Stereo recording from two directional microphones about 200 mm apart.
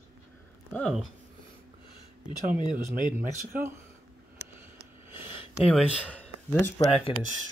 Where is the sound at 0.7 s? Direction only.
Centre (ahead or behind).